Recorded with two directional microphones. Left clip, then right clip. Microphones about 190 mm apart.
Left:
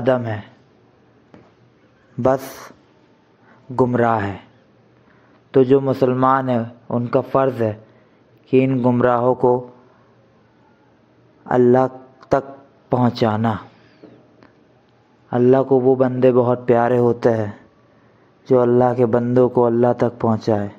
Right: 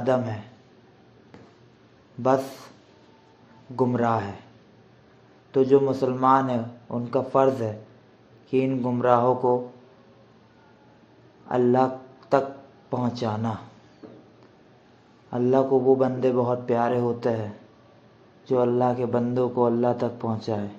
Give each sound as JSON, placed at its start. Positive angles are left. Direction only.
{"t": 0.0, "sound": "a man's voice", "side_deg": 30}
{"t": 2.2, "sound": "a man's voice", "side_deg": 40}
{"t": 3.7, "sound": "a man's voice", "side_deg": 35}
{"t": 5.5, "sound": "a man's voice", "side_deg": 35}
{"t": 11.4, "sound": "a man's voice", "side_deg": 40}
{"t": 15.2, "sound": "a man's voice", "side_deg": 35}